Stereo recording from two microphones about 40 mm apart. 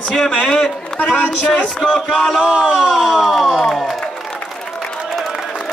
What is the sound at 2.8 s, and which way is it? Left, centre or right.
Speech, centre.